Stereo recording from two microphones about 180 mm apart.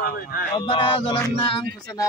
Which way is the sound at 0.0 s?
55° left (ahead or behind).